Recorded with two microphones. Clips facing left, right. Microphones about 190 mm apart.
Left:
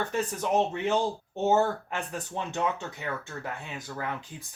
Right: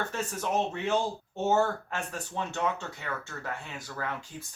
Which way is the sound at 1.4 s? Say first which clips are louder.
Left 2 dB; 15° left (ahead or behind).